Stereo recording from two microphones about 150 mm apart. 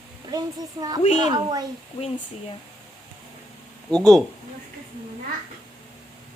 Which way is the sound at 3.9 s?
5° left (ahead or behind).